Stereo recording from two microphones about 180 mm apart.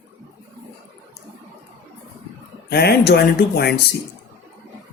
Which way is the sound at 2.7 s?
60° left (ahead or behind).